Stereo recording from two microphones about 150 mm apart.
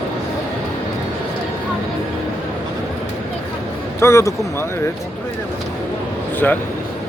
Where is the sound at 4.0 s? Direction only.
20° left (ahead or behind).